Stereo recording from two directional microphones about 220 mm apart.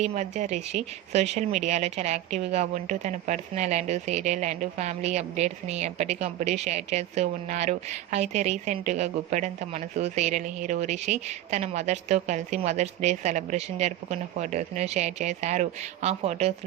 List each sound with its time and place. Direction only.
0.0 s speech: 30° right (ahead or behind)